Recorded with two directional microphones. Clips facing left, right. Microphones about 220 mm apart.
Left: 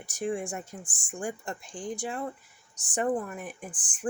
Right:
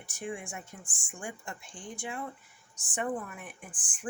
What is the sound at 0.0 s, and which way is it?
Speech, 40° left (ahead or behind).